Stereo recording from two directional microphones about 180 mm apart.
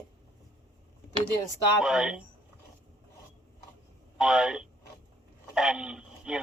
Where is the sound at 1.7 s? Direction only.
5° right (ahead or behind).